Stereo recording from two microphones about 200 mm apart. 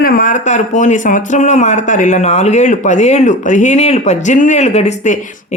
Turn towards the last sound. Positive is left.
turn(degrees=35)  # may be behind; listen again after turning